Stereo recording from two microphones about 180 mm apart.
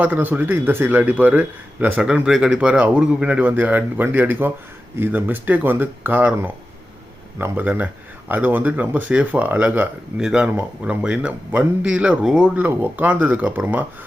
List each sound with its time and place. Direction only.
0.0 s speech: 10° right (ahead or behind)